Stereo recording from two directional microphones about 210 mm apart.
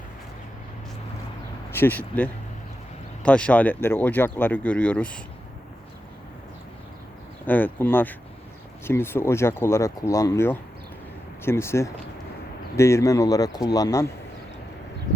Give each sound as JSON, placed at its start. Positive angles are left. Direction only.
{"t": 1.7, "sound": "speech", "side_deg": 10}
{"t": 7.4, "sound": "speech", "side_deg": 10}